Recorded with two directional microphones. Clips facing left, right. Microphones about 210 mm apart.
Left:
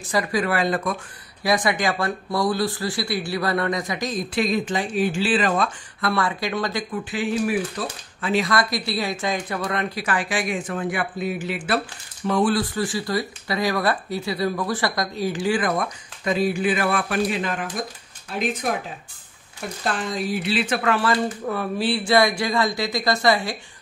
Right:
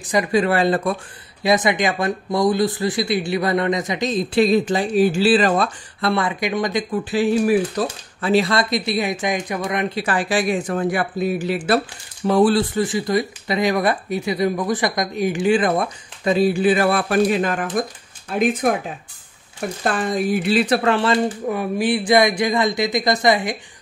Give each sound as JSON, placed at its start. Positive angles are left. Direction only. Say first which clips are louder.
{"t": 0.0, "sound": "speech", "louder": "right 5 dB", "side_deg": -20}
{"t": 7.1, "sound": "speech", "louder": "right 7 dB", "side_deg": -40}
{"t": 12.7, "sound": "speech", "louder": "right 5 dB", "side_deg": -20}
{"t": 19.8, "sound": "speech", "louder": "right 5 dB", "side_deg": -50}